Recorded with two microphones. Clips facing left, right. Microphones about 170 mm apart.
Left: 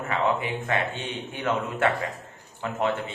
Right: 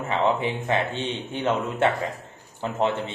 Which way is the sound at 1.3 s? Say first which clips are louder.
Right 2 dB; 25° right (ahead or behind).